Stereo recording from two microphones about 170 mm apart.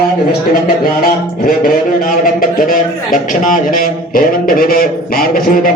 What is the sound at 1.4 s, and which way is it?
A man's voice, 60° left (ahead or behind).